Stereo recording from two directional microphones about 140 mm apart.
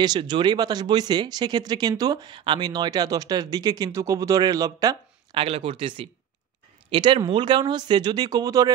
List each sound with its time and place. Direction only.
0.0 s speech: 30° right (ahead or behind)
5.4 s speech: 40° right (ahead or behind)